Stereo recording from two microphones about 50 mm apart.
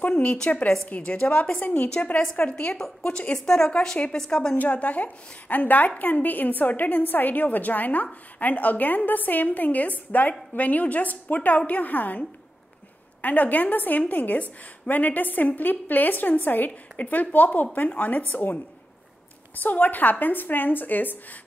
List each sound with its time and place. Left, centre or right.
0.1 s a woman's voice: left
1.8 s a woman's voice: left
4.6 s a woman's voice: left